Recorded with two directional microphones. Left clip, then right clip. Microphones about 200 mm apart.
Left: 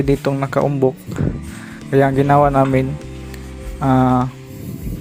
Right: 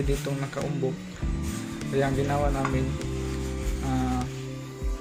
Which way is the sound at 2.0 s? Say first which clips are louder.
Left 13 dB; 50° left (ahead or behind).